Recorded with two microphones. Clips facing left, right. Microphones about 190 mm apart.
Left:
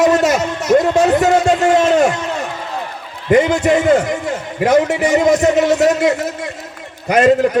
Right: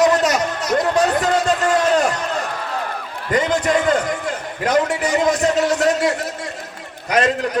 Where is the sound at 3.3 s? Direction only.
25° left (ahead or behind).